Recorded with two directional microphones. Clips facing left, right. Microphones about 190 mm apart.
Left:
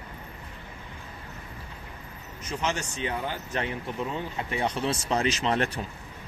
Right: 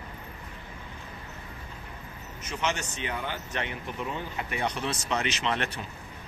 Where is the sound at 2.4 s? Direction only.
35° left (ahead or behind).